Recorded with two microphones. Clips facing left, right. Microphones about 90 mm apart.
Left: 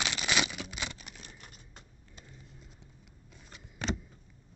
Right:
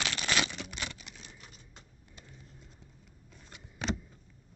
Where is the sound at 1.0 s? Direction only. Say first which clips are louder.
Left 1 dB; 50° left (ahead or behind).